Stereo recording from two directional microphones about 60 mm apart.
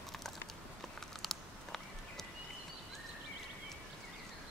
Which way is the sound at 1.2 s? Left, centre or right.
Centre.